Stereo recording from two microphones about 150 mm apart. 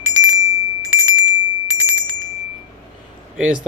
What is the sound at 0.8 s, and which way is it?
Bicycle bell, 15° right (ahead or behind).